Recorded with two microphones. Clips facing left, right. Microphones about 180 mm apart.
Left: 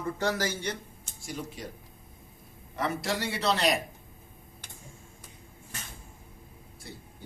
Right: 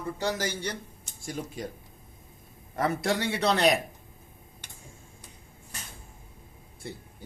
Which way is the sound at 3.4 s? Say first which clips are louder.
Right 2 dB; 50° right (ahead or behind).